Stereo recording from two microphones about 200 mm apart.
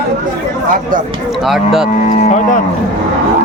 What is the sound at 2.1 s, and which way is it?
Speech, 35° left (ahead or behind).